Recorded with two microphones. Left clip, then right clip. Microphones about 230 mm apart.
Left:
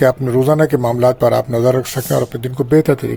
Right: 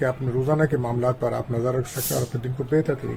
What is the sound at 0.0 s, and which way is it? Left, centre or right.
Speech, left.